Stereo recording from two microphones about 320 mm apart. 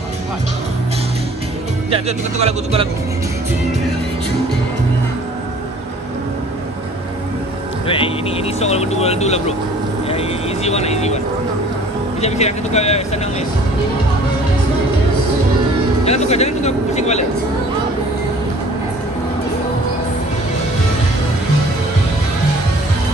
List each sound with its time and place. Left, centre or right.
1.9 s speech: centre
7.8 s speech: centre
10.0 s vehicle: centre
12.2 s speech: centre
16.1 s speech: centre